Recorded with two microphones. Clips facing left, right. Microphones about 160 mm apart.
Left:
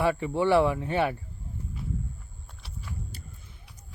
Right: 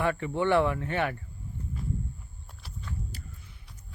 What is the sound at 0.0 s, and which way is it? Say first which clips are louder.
Speech: left 2 dB; 15° left (ahead or behind).